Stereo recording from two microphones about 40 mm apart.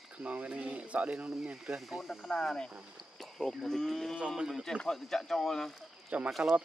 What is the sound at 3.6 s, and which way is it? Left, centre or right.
Speech, centre.